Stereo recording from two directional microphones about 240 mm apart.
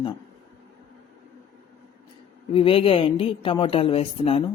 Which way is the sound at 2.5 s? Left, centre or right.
Left.